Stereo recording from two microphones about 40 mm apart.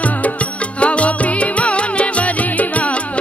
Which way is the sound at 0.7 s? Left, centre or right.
Left.